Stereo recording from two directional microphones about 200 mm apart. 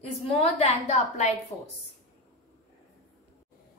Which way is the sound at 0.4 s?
35° left (ahead or behind).